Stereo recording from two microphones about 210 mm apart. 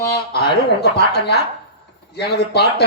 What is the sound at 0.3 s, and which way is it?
A man's voice, 50° left (ahead or behind).